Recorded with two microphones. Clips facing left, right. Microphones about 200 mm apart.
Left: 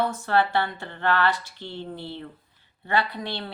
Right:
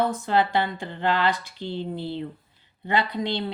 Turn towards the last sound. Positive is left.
turn(degrees=-20)  # may be behind; listen again after turning